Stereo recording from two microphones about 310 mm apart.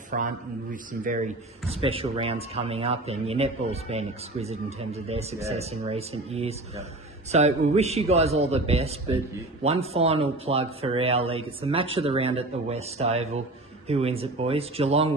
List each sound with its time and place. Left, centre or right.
0.1 s a man's voice: right